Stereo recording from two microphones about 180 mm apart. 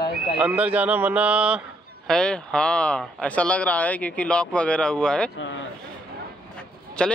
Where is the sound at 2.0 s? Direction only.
5° left (ahead or behind).